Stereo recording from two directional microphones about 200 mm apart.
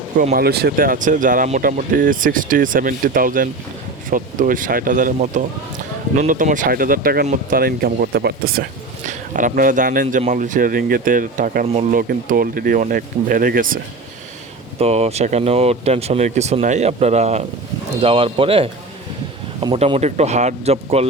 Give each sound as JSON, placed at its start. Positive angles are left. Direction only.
{"t": 0.2, "sound": "speech", "side_deg": -45}
{"t": 11.9, "sound": "speech", "side_deg": -45}
{"t": 14.8, "sound": "speech", "side_deg": -30}